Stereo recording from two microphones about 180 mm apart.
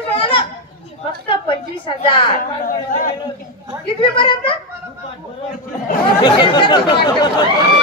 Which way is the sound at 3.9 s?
30° left (ahead or behind).